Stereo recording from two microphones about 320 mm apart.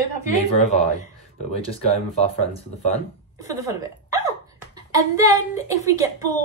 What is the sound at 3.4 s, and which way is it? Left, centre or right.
A child's voice, centre.